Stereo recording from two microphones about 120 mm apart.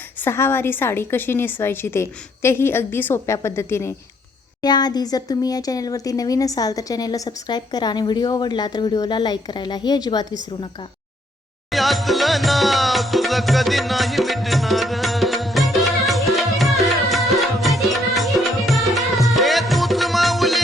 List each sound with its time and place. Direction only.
0.2 s a woman's voice: 20° left (ahead or behind)
4.6 s speech: 35° left (ahead or behind)
11.7 s music: centre (ahead or behind)